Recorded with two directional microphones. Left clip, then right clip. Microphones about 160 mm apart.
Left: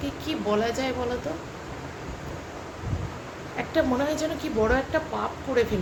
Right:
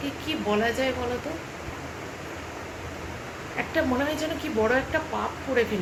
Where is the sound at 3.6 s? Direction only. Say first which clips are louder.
Left 1 dB; 10° left (ahead or behind).